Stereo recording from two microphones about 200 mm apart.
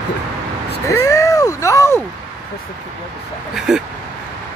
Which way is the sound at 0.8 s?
15° left (ahead or behind).